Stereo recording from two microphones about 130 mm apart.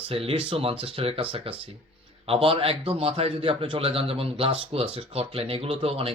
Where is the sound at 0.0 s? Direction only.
45° right (ahead or behind).